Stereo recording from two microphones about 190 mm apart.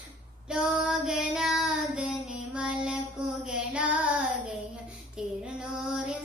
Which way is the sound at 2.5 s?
5° right (ahead or behind).